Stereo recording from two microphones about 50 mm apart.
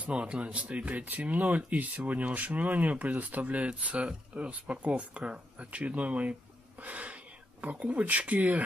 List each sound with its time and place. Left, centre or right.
0.0 s speech: right